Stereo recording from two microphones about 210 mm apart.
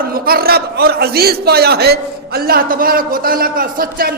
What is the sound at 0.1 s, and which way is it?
A man's voice, 45° right (ahead or behind).